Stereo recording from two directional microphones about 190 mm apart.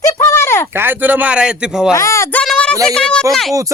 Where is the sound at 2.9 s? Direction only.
5° left (ahead or behind).